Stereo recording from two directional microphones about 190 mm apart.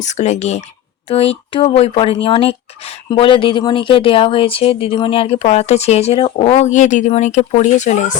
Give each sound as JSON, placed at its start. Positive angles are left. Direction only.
{"t": 0.0, "sound": "speech", "side_deg": 35}